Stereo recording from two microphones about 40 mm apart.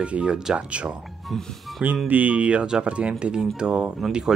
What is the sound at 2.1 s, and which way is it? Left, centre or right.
Speech, right.